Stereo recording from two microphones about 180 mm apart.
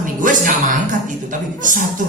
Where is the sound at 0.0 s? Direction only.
50° right (ahead or behind).